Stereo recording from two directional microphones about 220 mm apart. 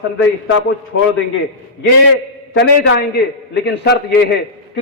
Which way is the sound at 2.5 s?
55° left (ahead or behind).